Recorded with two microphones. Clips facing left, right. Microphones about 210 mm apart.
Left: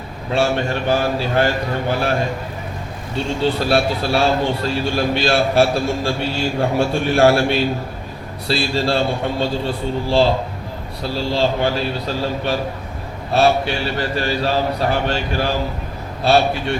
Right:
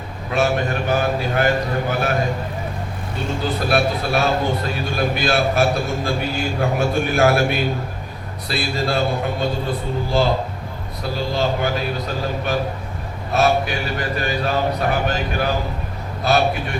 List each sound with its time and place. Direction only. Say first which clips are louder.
0.3 s a man's voice: left 1 dB; 30° left (ahead or behind)
3.4 s a man's voice: left 2 dB; 30° left (ahead or behind)
11.0 s mantra: left 2 dB; 30° left (ahead or behind)
16.2 s a man's voice: left 3 dB; 30° left (ahead or behind)